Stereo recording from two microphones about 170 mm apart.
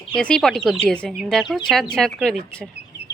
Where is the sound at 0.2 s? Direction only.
5° left (ahead or behind).